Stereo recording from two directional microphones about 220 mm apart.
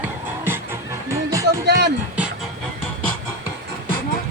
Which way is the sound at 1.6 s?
50° right (ahead or behind).